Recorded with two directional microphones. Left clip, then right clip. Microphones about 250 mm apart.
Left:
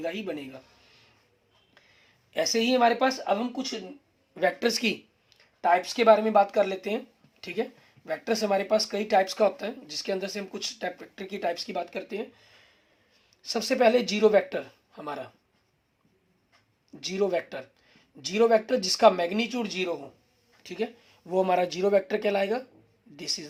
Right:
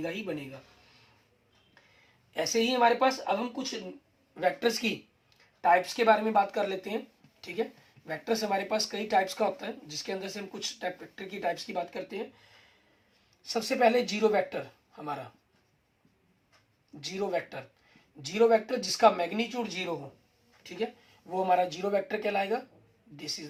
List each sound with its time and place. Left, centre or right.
2.3 s speech: left
13.4 s speech: left
17.0 s speech: left
21.2 s speech: left